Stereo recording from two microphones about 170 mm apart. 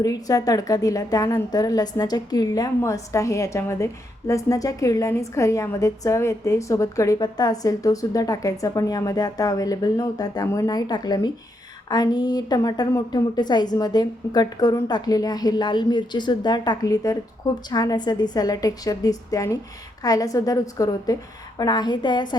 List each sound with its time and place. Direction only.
0.0 s a woman's voice: 20° left (ahead or behind)